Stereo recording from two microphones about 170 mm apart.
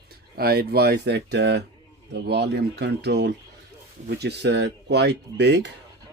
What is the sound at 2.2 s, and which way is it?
Speech, 75° right (ahead or behind).